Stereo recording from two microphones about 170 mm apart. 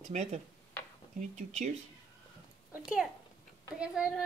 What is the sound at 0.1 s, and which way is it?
Speech, 40° right (ahead or behind).